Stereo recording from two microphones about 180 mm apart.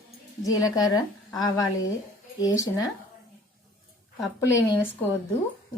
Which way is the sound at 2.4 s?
20° left (ahead or behind).